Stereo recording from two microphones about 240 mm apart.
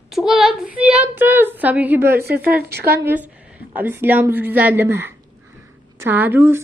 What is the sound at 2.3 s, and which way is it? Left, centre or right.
Speech, right.